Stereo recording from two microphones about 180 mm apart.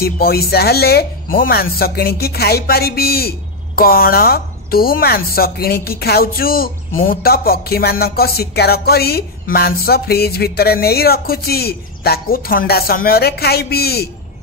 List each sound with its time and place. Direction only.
0.0 s speech: 60° left (ahead or behind)